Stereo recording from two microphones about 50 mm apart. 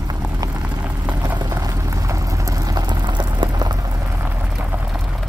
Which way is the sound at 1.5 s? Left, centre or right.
Right.